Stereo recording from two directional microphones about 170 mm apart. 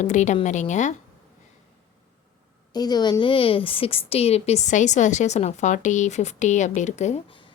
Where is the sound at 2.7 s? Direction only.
25° left (ahead or behind); by 7.3 s 40° left (ahead or behind).